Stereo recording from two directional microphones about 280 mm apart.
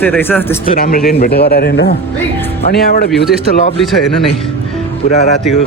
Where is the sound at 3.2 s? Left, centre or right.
Centre.